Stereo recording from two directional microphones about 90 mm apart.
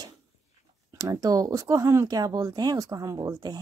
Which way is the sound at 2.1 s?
45° right (ahead or behind).